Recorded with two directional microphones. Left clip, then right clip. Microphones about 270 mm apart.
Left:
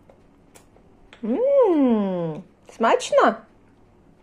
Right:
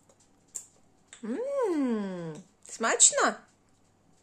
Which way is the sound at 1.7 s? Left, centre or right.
Centre.